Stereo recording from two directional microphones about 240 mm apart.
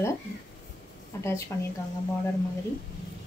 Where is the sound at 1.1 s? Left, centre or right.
Centre.